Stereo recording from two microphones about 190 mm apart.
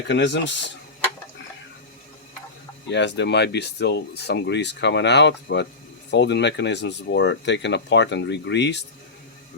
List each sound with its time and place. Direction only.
0.1 s speech: 65° left (ahead or behind)
2.9 s speech: 70° left (ahead or behind)